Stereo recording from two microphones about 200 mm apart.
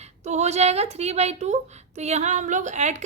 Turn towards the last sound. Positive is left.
turn(degrees=-35)  # may be behind; listen again after turning